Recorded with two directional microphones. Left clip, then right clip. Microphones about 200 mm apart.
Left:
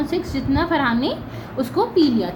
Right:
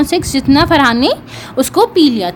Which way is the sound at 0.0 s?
60° right (ahead or behind).